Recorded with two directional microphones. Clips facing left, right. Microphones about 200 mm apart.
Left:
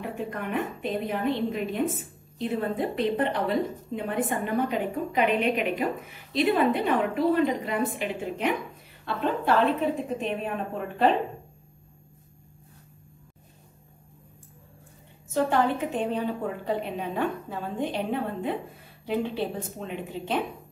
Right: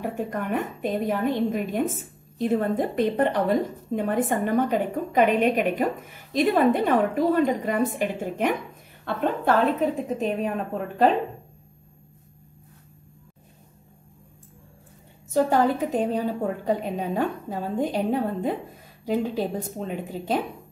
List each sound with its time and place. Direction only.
0.0 s a woman's voice: 45° right (ahead or behind)
15.3 s a woman's voice: 40° right (ahead or behind)